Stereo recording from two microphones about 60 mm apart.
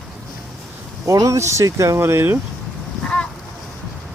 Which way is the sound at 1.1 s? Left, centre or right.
Right.